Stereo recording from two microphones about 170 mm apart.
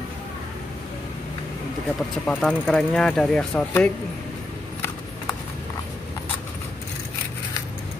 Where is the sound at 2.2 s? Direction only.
5° left (ahead or behind).